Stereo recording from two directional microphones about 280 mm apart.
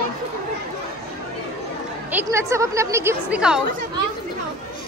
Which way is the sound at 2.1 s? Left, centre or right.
Centre.